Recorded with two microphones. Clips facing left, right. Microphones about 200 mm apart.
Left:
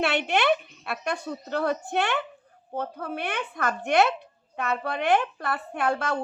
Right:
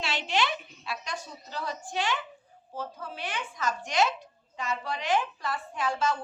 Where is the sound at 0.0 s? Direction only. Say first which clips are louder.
Left 6 dB; 60° left (ahead or behind).